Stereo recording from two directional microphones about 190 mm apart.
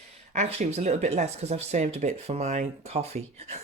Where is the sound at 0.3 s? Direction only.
35° right (ahead or behind).